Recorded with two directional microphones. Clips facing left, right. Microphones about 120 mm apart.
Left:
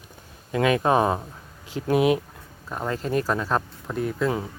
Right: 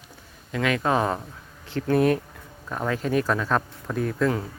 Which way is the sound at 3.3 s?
35° left (ahead or behind).